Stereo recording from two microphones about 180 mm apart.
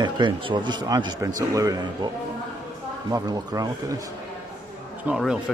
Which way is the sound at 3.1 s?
20° right (ahead or behind).